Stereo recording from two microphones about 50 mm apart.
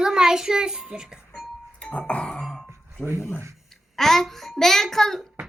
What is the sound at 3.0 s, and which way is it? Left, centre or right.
Speech, left.